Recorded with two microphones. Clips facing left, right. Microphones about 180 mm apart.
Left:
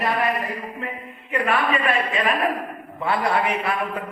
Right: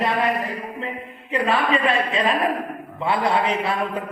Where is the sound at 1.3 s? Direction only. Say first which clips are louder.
Right 1 dB; 25° right (ahead or behind).